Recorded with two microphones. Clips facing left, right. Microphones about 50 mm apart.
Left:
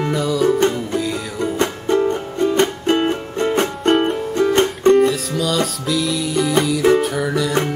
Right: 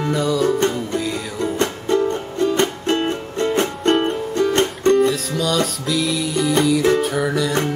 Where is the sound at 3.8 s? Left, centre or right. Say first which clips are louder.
Left 2 dB; centre.